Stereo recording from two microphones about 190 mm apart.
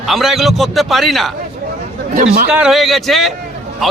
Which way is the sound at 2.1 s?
45° right (ahead or behind).